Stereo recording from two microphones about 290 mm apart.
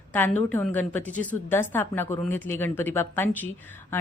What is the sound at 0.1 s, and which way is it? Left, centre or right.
A woman's voice, centre.